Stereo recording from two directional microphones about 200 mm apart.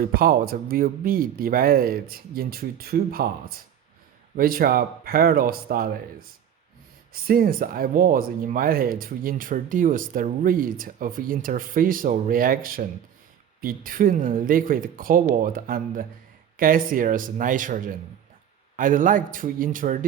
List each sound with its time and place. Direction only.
0.0 s speech: 45° right (ahead or behind)
4.4 s speech: 45° right (ahead or behind)